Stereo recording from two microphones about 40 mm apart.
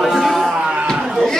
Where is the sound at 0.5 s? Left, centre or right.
Right.